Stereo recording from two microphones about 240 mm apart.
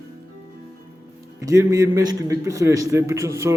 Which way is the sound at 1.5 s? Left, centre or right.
Centre.